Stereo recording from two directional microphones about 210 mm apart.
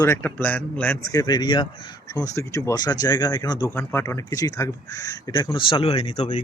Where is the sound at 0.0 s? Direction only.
10° left (ahead or behind).